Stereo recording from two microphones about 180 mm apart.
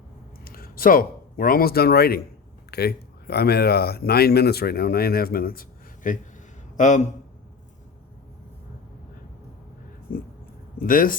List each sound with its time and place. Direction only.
0.4 s a man's voice: 55° left (ahead or behind)
10.1 s a man's voice: 50° left (ahead or behind)